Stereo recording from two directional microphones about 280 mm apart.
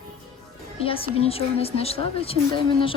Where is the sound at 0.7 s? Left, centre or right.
Centre.